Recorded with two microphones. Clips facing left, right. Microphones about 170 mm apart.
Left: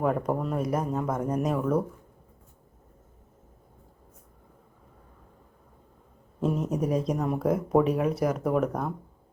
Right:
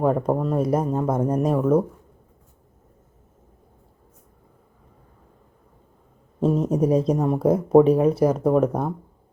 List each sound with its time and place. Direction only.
0.0 s speech: 25° right (ahead or behind)
6.4 s speech: 35° right (ahead or behind)